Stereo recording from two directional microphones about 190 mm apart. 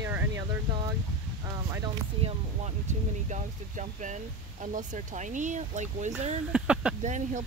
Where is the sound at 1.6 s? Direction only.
20° right (ahead or behind); by 6.1 s 40° right (ahead or behind).